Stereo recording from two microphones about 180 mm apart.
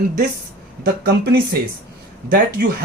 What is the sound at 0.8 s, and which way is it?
Speech, 55° right (ahead or behind).